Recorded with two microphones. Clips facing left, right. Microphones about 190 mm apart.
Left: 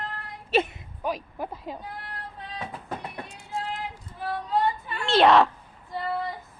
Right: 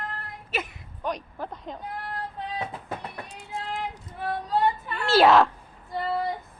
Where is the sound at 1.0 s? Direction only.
5° left (ahead or behind).